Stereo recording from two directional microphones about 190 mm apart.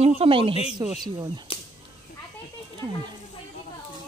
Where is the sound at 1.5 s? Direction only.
30° left (ahead or behind).